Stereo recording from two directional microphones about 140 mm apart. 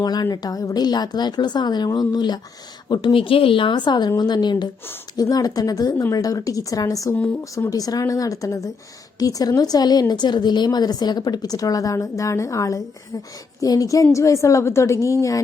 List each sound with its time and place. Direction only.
0.0 s a woman's voice: 30° left (ahead or behind)